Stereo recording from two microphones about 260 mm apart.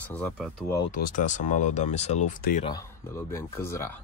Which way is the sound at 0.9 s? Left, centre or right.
Left.